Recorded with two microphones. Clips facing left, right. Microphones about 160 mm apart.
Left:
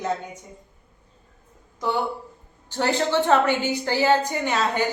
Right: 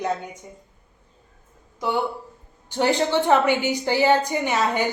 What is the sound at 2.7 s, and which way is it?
Speech, 15° right (ahead or behind).